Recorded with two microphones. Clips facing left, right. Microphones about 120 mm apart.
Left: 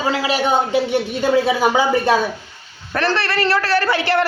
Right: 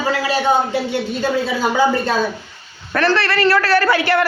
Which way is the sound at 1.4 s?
15° left (ahead or behind).